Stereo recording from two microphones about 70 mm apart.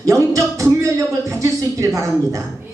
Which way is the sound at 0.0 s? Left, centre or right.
Right.